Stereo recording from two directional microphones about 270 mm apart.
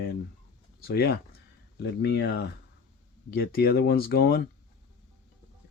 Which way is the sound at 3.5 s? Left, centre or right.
Left.